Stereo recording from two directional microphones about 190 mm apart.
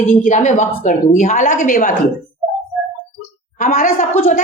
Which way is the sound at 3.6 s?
45° left (ahead or behind).